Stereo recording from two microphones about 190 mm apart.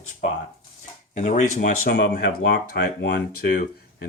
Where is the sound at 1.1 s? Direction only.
40° left (ahead or behind).